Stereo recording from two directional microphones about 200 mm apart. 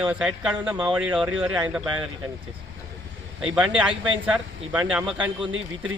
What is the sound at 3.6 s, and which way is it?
Speech, 5° right (ahead or behind).